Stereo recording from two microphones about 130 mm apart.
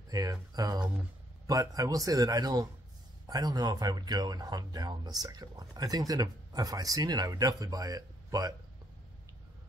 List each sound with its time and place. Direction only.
0.1 s speech: 30° right (ahead or behind)